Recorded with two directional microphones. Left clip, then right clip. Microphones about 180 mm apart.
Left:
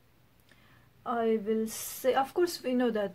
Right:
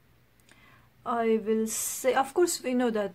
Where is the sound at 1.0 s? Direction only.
25° right (ahead or behind).